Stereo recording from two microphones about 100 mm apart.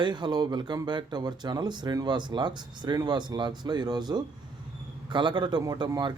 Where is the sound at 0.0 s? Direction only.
50° right (ahead or behind).